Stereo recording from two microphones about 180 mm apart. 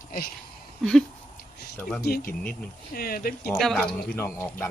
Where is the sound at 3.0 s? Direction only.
55° left (ahead or behind).